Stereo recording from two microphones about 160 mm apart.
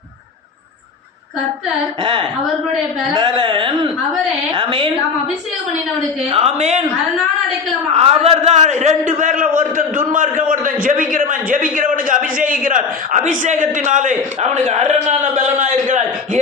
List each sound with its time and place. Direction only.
2.0 s speech: 30° right (ahead or behind)
6.3 s a man's voice: 40° right (ahead or behind)
7.9 s a man's voice: 40° right (ahead or behind)